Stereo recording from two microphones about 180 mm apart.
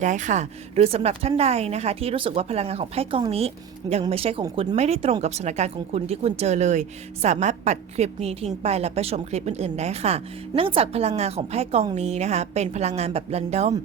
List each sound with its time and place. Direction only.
0.0 s speech: 45° right (ahead or behind)